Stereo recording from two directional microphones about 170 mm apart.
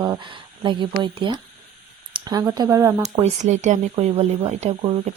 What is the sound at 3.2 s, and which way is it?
Speech, 45° right (ahead or behind).